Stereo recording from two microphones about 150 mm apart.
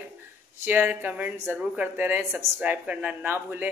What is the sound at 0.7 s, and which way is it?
Speech, 10° right (ahead or behind).